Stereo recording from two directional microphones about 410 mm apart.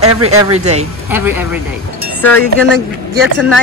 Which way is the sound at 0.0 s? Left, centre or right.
Right.